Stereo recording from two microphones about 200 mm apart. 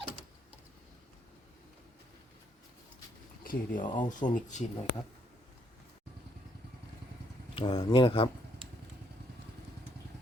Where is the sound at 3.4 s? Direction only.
45° left (ahead or behind).